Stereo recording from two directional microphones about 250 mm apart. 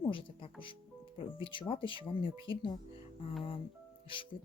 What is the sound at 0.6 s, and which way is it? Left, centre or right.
Speech, left.